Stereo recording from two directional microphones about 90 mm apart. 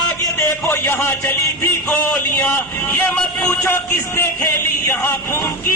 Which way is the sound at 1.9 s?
20° left (ahead or behind).